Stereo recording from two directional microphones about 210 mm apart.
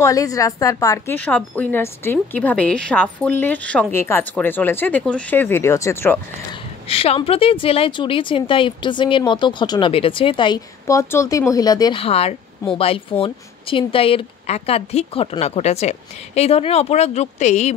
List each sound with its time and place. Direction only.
0.0 s a woman's voice: 15° left (ahead or behind)
6.9 s a woman's voice: 25° left (ahead or behind)